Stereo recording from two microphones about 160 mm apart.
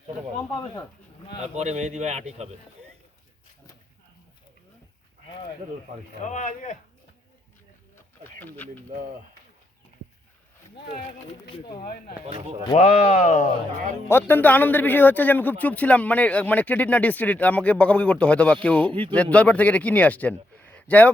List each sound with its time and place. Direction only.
1.5 s speech: 45° right (ahead or behind)
6.2 s speech: 50° left (ahead or behind)
8.4 s a man's voice: 10° left (ahead or behind)
11.5 s speech: 30° left (ahead or behind)
11.8 s speech: 65° left (ahead or behind)
12.7 s speech: 40° left (ahead or behind)
14.1 s a man's voice: 15° left (ahead or behind)